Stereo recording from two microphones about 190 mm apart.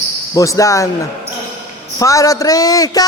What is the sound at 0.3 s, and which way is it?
Speech, 15° left (ahead or behind).